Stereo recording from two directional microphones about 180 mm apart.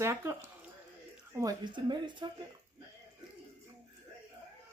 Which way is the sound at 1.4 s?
25° right (ahead or behind).